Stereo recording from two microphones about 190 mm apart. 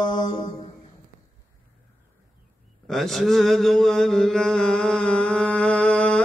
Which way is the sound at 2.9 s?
Centre (ahead or behind).